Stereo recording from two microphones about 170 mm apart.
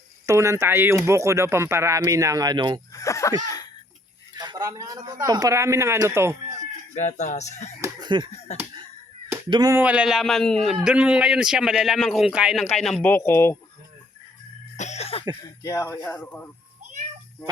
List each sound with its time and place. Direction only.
0.3 s speech: 15° right (ahead or behind)
2.9 s speech: 20° left (ahead or behind)
4.4 s speech: 20° right (ahead or behind)
6.9 s speech: 45° left (ahead or behind)
7.8 s a sound: 25° right (ahead or behind)
8.3 s a sound: 40° left (ahead or behind)
9.5 s speech: 25° right (ahead or behind)
9.7 s a man's voice: 10° right (ahead or behind); by 13.6 s 15° left (ahead or behind)
14.8 s cough: 40° left (ahead or behind)
15.6 s speech: 15° left (ahead or behind)